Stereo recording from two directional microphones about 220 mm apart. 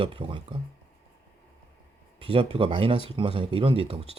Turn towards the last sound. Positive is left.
turn(degrees=-25)  # may be behind; listen again after turning